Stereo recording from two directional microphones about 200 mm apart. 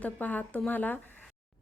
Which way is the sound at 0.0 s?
5° left (ahead or behind).